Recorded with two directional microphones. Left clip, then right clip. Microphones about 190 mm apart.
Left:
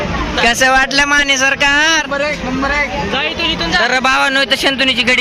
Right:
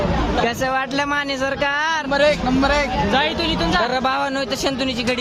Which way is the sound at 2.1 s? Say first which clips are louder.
Right 1 dB; 45° right (ahead or behind).